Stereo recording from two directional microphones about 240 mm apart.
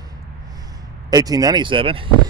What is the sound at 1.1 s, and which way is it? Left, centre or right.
Speech, centre.